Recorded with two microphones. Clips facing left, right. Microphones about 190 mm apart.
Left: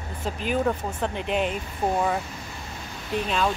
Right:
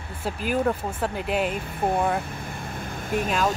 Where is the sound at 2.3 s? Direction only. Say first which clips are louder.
Right 4 dB; 55° right (ahead or behind).